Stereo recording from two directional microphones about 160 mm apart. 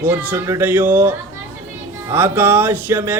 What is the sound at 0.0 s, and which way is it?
Music, 10° right (ahead or behind).